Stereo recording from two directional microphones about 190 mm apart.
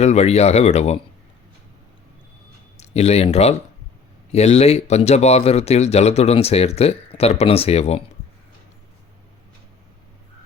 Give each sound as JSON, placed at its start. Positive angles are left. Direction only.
{"t": 0.0, "sound": "speech", "side_deg": 35}
{"t": 2.7, "sound": "speech", "side_deg": 35}